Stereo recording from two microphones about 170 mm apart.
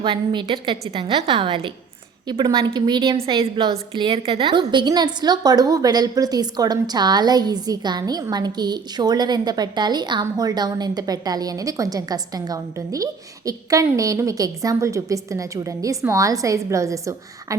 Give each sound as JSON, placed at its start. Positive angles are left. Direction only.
{"t": 0.0, "sound": "a woman's voice", "side_deg": -25}